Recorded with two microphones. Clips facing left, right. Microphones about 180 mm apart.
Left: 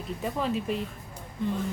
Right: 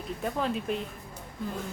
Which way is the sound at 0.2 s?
Centre (ahead or behind).